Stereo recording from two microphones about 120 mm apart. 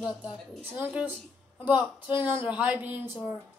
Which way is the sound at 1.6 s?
15° right (ahead or behind).